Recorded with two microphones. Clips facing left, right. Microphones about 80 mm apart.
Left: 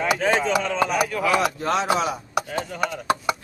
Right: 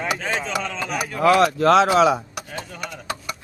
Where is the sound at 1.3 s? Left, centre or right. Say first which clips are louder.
Right 10 dB; right.